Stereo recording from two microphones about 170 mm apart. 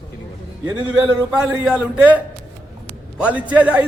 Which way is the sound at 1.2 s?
10° right (ahead or behind).